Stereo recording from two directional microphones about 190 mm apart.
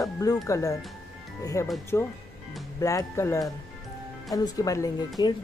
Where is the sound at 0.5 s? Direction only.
15° left (ahead or behind).